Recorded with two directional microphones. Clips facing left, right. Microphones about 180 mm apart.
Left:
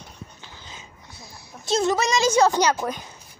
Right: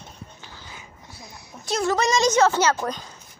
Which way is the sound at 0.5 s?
20° left (ahead or behind).